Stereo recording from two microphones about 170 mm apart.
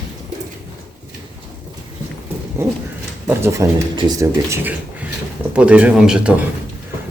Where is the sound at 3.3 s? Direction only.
15° right (ahead or behind).